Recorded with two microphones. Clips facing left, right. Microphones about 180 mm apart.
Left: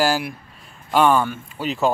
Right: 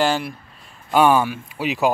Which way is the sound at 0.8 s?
5° right (ahead or behind).